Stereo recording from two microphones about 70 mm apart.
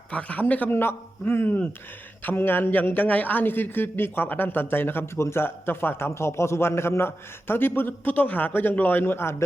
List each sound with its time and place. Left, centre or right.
0.1 s speech: centre
0.7 s a man's voice: left